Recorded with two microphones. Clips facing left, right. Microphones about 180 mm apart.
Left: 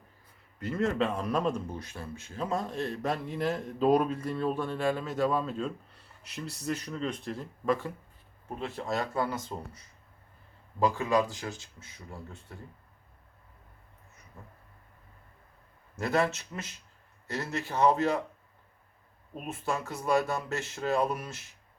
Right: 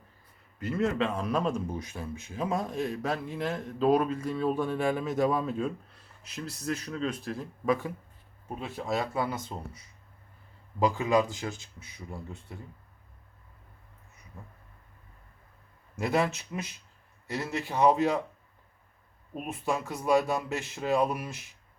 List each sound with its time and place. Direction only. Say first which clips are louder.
0.6 s speech: right 1 dB; 5° right (ahead or behind)
6.2 s speech: right 1 dB; centre (ahead or behind)
16.0 s speech: even; 15° right (ahead or behind)
19.3 s speech: right 2 dB; 15° right (ahead or behind)